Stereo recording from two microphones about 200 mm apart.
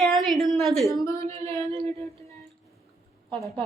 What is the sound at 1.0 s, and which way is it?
Speech, 15° left (ahead or behind).